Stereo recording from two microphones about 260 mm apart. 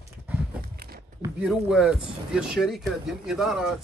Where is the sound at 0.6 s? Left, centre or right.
Right.